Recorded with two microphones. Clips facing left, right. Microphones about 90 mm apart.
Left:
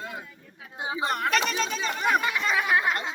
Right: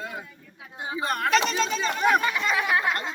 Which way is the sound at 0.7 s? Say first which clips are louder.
Left 1 dB; 10° left (ahead or behind).